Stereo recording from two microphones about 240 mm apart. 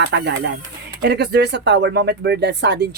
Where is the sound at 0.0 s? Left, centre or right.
Right.